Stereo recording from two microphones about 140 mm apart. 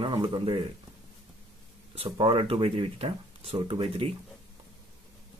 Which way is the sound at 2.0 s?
40° right (ahead or behind).